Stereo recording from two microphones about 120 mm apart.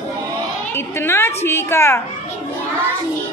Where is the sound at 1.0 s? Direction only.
20° left (ahead or behind).